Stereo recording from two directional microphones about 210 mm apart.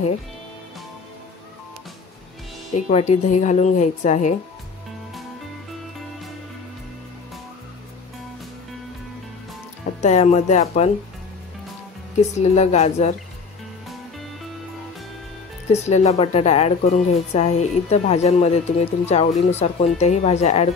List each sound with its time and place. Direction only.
2.7 s a woman's voice: 30° left (ahead or behind)
10.0 s a woman's voice: 30° left (ahead or behind)
12.4 s a woman's voice: 30° left (ahead or behind)
15.7 s a woman's voice: 30° left (ahead or behind)